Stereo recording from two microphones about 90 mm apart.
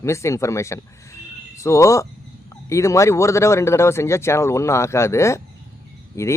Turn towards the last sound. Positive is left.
turn(degrees=35)  # may be behind; listen again after turning